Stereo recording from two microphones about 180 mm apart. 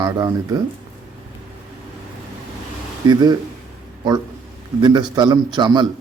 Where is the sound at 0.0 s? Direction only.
20° right (ahead or behind).